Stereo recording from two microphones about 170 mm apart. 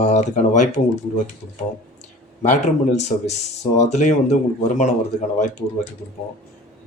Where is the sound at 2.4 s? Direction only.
45° left (ahead or behind).